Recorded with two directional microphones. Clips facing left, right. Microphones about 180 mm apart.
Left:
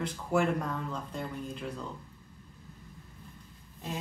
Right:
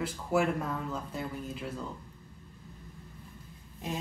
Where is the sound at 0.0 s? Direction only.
5° right (ahead or behind).